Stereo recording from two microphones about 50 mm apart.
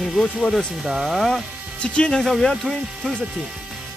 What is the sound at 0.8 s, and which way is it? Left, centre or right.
Speech, centre.